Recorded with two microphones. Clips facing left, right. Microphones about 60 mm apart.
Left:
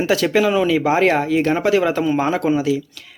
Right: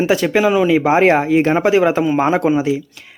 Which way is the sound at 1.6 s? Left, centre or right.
Centre.